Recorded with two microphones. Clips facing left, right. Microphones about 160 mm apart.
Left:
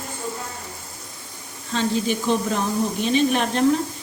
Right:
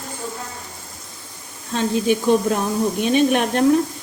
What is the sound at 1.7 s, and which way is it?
Speech, 50° right (ahead or behind).